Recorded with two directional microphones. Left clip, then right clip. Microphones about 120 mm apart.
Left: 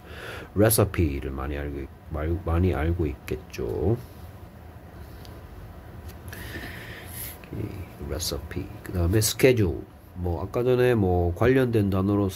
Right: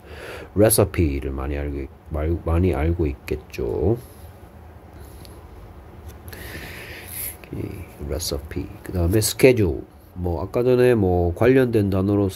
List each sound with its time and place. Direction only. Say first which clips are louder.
0.1 s speech: right 4 dB; 30° right (ahead or behind)
6.3 s a sound: right 2 dB; 40° right (ahead or behind)
10.2 s speech: right 5 dB; 40° right (ahead or behind)